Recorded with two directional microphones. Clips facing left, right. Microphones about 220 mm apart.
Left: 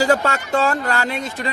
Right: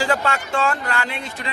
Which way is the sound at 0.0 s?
40° left (ahead or behind).